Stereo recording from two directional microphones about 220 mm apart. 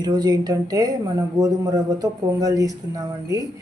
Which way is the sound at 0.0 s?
20° right (ahead or behind).